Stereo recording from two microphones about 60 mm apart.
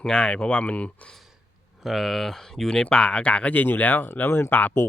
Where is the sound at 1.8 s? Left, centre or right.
Centre.